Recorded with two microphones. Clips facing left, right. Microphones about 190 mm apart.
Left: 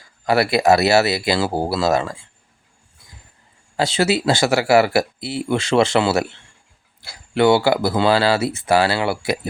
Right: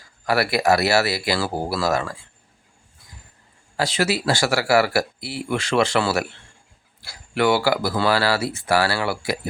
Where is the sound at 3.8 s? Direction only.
25° left (ahead or behind).